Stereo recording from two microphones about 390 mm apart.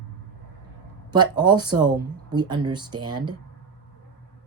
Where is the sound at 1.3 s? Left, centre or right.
Centre.